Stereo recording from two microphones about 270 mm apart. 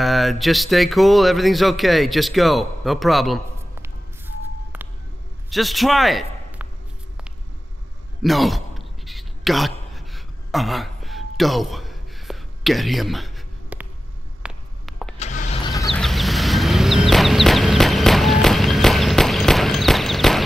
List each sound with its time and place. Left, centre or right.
0.0 s speech: centre
4.7 s vehicle: centre
5.5 s a man's voice: centre
8.2 s a sound: centre
15.1 s vehicle: left
15.9 s chicken: centre